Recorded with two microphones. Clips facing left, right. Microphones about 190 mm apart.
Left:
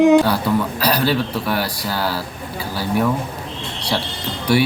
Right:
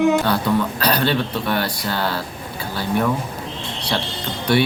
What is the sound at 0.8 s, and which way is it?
Speech, 5° left (ahead or behind).